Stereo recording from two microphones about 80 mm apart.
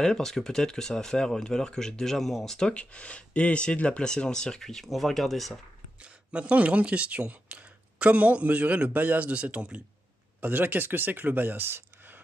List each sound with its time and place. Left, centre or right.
0.0 s speech: centre
5.9 s speech: centre